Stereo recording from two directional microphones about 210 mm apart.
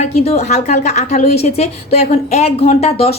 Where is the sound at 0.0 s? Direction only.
30° left (ahead or behind).